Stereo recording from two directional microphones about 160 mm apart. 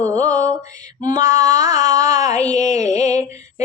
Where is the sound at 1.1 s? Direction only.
20° right (ahead or behind).